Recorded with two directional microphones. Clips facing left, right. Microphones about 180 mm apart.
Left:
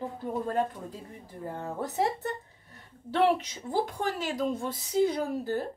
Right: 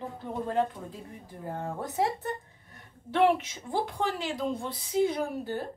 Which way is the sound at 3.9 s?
45° left (ahead or behind).